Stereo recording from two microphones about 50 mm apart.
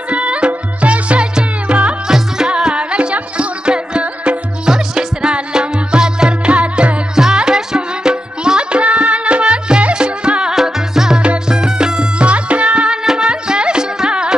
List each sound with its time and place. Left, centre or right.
0.1 s music: right
2.0 s music: centre
7.2 s music: centre